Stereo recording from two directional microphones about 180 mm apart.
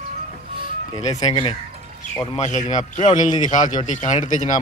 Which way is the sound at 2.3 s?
40° left (ahead or behind).